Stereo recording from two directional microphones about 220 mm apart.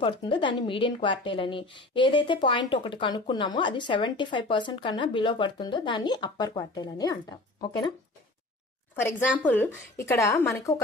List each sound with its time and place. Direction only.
0.0 s a woman's voice: 20° left (ahead or behind)
9.4 s speech: 10° left (ahead or behind)